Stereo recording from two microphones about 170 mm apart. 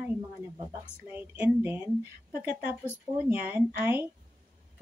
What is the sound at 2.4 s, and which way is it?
Speech, 55° right (ahead or behind).